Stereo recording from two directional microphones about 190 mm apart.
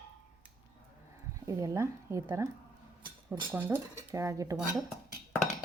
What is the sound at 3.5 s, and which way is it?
Speech, 10° right (ahead or behind).